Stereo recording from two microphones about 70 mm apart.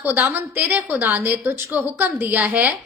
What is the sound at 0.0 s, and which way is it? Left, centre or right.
A woman's voice, right.